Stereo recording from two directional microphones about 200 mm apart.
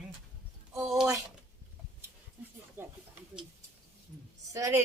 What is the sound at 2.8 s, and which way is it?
Speech, 10° right (ahead or behind).